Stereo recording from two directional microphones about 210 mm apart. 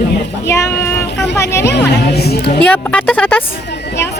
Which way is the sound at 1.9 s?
50° left (ahead or behind).